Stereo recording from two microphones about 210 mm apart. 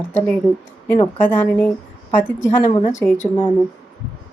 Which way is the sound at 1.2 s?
10° left (ahead or behind).